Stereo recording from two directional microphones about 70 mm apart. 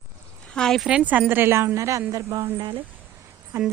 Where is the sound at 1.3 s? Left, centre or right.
Right.